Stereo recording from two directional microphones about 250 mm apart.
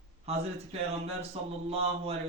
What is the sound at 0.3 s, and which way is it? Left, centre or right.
Speech, right.